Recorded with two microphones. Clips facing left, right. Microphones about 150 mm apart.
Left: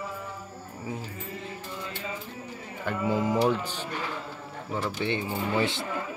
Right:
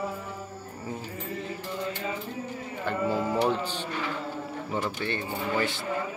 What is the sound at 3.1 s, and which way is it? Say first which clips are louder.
Speech: left 3 dB; 15° left (ahead or behind).